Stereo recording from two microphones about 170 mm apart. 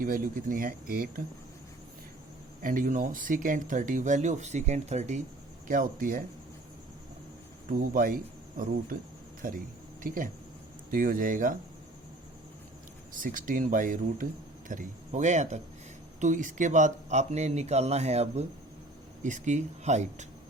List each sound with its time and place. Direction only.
0.0 s speech: 55° right (ahead or behind)
2.6 s speech: 55° right (ahead or behind)
7.7 s speech: 55° right (ahead or behind)
10.9 s speech: 50° right (ahead or behind)
13.1 s speech: 50° right (ahead or behind)